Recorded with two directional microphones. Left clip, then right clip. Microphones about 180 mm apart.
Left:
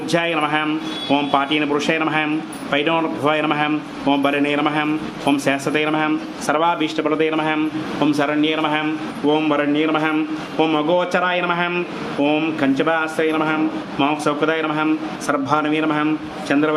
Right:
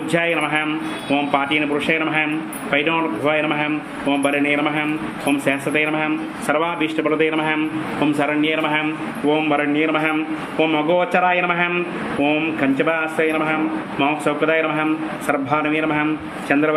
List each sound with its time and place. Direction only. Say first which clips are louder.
0.1 s a man's voice: even; 15° left (ahead or behind)